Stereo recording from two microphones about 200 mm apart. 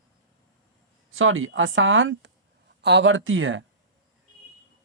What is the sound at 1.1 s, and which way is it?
Speech, 80° right.